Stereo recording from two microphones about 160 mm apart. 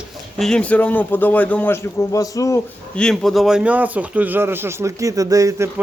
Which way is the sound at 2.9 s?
5° left (ahead or behind).